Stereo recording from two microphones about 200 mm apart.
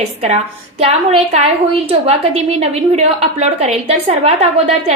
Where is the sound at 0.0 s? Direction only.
35° right (ahead or behind).